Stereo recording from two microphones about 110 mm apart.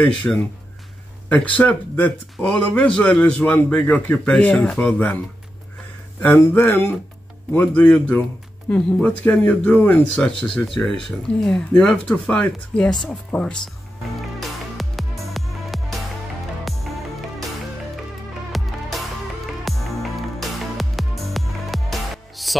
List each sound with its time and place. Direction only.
0.0 s speech: 10° left (ahead or behind)
6.2 s speech: 20° left (ahead or behind)
14.4 s music: centre (ahead or behind)
18.5 s music: centre (ahead or behind)